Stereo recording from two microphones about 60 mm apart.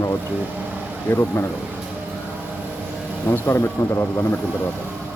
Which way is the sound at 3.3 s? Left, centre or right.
Left.